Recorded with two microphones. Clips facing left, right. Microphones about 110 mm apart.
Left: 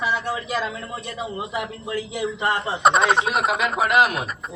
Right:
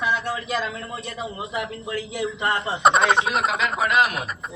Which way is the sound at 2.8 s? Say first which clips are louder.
Even; centre (ahead or behind).